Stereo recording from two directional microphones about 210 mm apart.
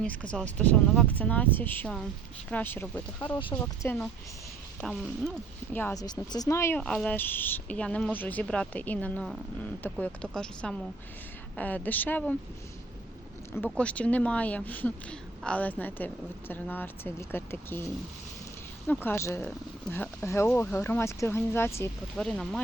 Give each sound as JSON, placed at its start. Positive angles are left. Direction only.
{"t": 0.0, "sound": "speech", "side_deg": 5}
{"t": 3.2, "sound": "speech", "side_deg": 20}
{"t": 3.5, "sound": "speech", "side_deg": 10}
{"t": 5.7, "sound": "speech", "side_deg": 15}
{"t": 13.5, "sound": "speech", "side_deg": 5}